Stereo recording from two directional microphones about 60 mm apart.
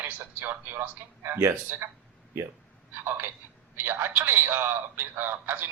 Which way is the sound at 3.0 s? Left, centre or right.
Right.